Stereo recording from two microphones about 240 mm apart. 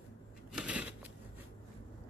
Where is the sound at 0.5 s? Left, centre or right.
Centre.